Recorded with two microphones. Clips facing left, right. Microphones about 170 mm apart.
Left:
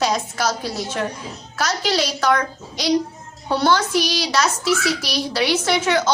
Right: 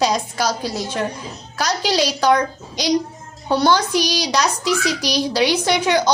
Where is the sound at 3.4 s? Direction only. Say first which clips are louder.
Right 2 dB; 15° right (ahead or behind).